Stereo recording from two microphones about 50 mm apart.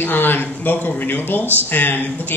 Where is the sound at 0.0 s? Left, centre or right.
Left.